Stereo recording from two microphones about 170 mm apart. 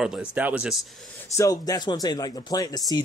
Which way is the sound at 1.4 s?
20° left (ahead or behind).